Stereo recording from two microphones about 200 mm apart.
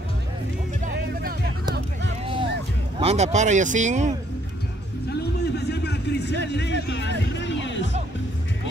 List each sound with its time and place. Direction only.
0.8 s music: 50° right (ahead or behind)
3.0 s speech: 30° right (ahead or behind)
5.2 s a sound: 55° left (ahead or behind)
6.4 s music: 60° left (ahead or behind)